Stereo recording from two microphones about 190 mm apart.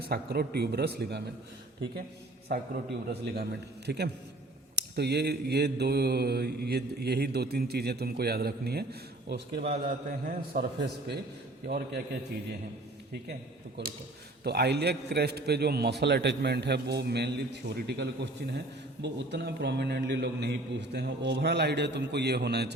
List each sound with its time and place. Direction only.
0.0 s mantra: 55° right (ahead or behind)
2.5 s mantra: 60° right (ahead or behind)
9.8 s a man's voice: 50° right (ahead or behind)
11.6 s mantra: 55° right (ahead or behind)
14.4 s mantra: 60° right (ahead or behind)